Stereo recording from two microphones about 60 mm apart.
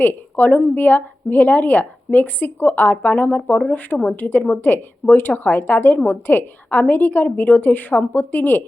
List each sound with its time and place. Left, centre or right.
0.0 s a woman's voice: left
4.1 s a woman's voice: left